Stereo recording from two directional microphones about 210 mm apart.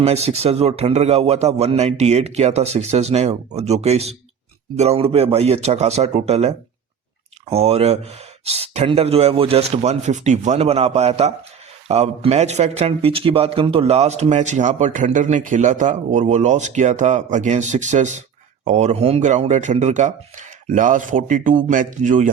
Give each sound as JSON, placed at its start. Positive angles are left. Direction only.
{"t": 0.0, "sound": "speech", "side_deg": -30}